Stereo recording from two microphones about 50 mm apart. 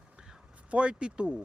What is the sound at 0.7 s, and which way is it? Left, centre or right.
Speech, right.